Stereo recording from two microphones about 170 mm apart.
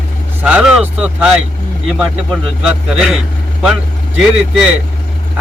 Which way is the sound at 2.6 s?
5° right (ahead or behind).